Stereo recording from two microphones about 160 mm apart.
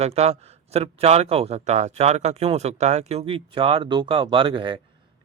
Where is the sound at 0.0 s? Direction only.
40° right (ahead or behind).